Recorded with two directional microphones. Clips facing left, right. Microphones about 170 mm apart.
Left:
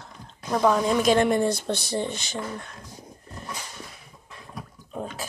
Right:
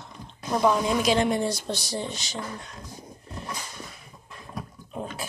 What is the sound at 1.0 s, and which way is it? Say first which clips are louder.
Speech: left 3 dB; 50° left (ahead or behind).